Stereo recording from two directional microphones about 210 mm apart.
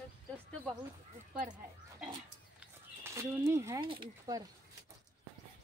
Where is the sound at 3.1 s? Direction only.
10° right (ahead or behind).